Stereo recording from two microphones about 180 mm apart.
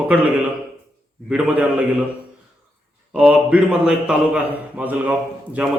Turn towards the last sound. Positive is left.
turn(degrees=-5)  # may be behind; listen again after turning